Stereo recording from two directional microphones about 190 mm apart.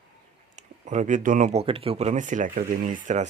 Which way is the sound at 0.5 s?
40° right (ahead or behind).